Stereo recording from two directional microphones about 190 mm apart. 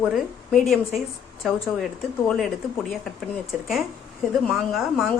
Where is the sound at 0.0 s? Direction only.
Centre (ahead or behind).